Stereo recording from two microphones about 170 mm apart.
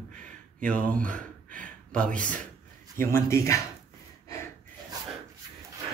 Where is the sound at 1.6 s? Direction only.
5° left (ahead or behind).